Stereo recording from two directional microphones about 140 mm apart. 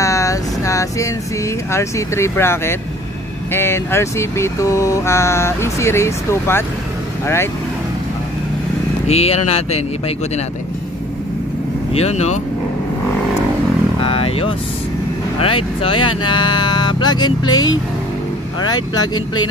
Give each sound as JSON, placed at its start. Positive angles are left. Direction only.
{"t": 0.0, "sound": "vehicle", "side_deg": 20}
{"t": 1.7, "sound": "speech", "side_deg": 20}
{"t": 3.5, "sound": "mantra", "side_deg": 15}
{"t": 9.0, "sound": "speech", "side_deg": 50}
{"t": 11.9, "sound": "speech", "side_deg": 50}
{"t": 14.0, "sound": "vehicle", "side_deg": 40}
{"t": 15.3, "sound": "speech", "side_deg": 40}
{"t": 18.6, "sound": "mantra", "side_deg": 30}